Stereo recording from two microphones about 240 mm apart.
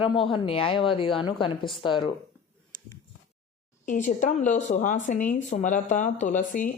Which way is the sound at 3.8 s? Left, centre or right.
Left.